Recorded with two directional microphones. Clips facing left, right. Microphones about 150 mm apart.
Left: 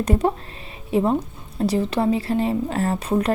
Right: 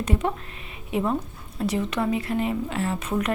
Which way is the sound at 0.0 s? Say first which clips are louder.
Left 5 dB; 40° left (ahead or behind).